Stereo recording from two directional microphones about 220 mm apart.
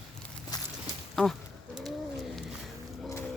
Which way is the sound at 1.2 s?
5° left (ahead or behind).